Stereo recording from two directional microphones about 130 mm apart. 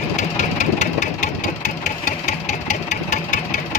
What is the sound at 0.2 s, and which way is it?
Engine, 65° left (ahead or behind).